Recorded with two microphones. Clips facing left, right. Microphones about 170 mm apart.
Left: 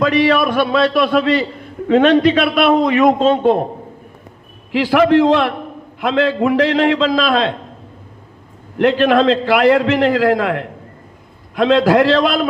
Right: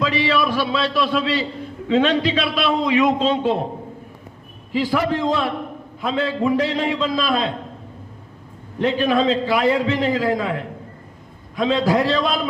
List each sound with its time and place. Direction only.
0.0 s a man's voice: 55° left (ahead or behind)
4.7 s a man's voice: 75° left (ahead or behind)
8.8 s a man's voice: 75° left (ahead or behind)